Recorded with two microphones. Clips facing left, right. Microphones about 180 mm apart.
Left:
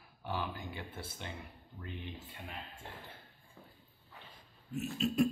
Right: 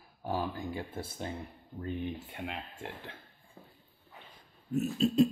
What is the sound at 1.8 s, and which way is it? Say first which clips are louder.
Speech: right 9 dB; 50° right (ahead or behind).